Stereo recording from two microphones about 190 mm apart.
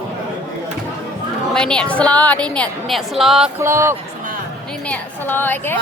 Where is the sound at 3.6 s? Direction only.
15° right (ahead or behind).